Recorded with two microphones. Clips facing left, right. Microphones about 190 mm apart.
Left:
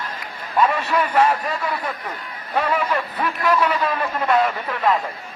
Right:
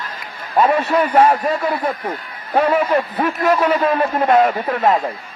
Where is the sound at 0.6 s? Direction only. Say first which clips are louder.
Right 4 dB; 45° right (ahead or behind).